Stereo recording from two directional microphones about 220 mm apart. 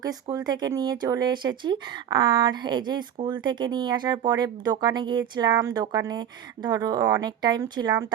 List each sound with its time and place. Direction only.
0.0 s speech: 15° right (ahead or behind)